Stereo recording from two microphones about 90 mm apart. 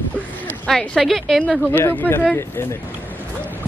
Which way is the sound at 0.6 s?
5° left (ahead or behind).